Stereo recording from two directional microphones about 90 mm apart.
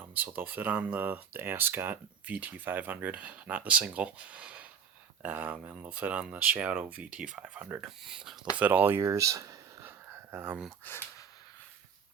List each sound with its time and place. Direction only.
0.1 s speech: 20° right (ahead or behind); by 8.4 s 5° right (ahead or behind)
8.5 s speech: 20° right (ahead or behind); by 9.6 s 35° right (ahead or behind)
9.8 s a sound: 25° right (ahead or behind)
10.9 s speech: 20° left (ahead or behind)